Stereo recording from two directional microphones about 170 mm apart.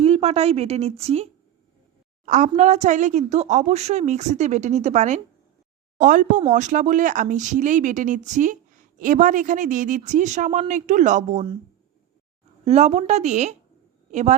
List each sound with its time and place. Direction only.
0.0 s a woman's voice: 40° right (ahead or behind)
12.6 s a woman's voice: 40° right (ahead or behind)